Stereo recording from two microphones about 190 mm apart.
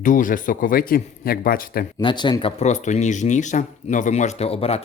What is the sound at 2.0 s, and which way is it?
Speech, 25° left (ahead or behind).